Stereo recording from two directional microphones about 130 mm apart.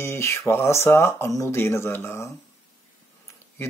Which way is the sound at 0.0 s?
20° left (ahead or behind).